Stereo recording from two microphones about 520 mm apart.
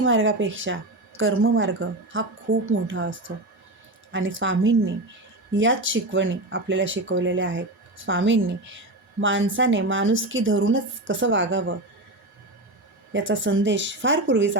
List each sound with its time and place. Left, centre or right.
0.0 s a woman's voice: right
13.1 s a woman's voice: right